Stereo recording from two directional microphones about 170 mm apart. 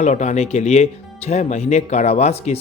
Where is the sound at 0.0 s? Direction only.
45° left (ahead or behind).